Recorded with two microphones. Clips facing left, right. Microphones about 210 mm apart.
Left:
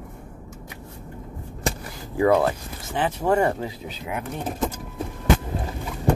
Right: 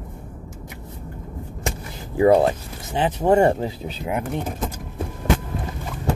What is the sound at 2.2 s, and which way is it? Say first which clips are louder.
Speech: right 4 dB; 25° right (ahead or behind).